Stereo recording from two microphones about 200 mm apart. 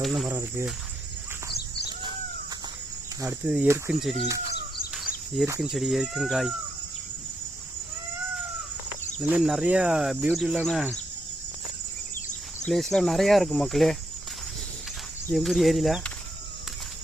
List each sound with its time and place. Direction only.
0.0 s speech: centre (ahead or behind)
3.2 s speech: 10° right (ahead or behind)
4.9 s insect: centre (ahead or behind)
5.5 s speech: centre (ahead or behind)
9.3 s speech: 5° right (ahead or behind)
12.6 s speech: centre (ahead or behind)
15.3 s speech: centre (ahead or behind)